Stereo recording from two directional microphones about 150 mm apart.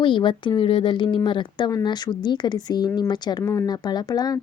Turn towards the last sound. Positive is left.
turn(degrees=25)  # may be behind; listen again after turning